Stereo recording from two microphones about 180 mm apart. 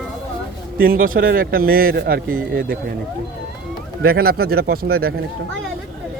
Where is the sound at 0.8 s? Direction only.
55° right (ahead or behind).